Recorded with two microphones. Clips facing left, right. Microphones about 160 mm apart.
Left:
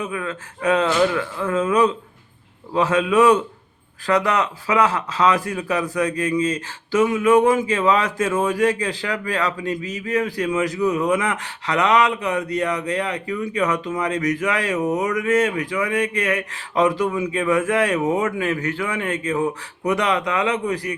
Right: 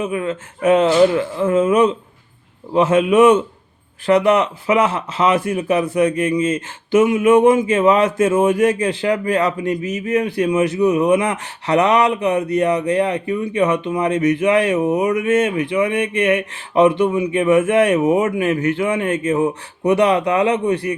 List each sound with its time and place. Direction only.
0.0 s speech: 25° right (ahead or behind)
11.2 s speech: 30° right (ahead or behind)